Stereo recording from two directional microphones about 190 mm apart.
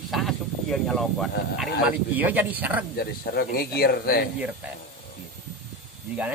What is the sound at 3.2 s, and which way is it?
A man's voice, 55° left (ahead or behind).